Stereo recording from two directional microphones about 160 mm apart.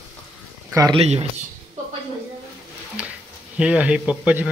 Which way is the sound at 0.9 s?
40° right (ahead or behind).